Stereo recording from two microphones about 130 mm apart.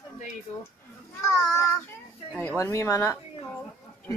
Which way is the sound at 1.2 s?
20° left (ahead or behind).